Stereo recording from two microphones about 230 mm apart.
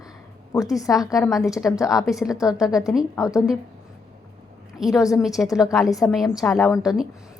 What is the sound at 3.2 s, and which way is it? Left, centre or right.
Speech, centre.